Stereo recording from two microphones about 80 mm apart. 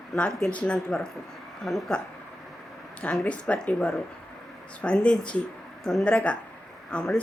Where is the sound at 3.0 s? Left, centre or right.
Centre.